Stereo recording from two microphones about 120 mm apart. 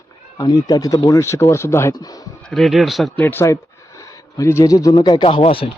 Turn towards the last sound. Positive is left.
turn(degrees=50)  # may be behind; listen again after turning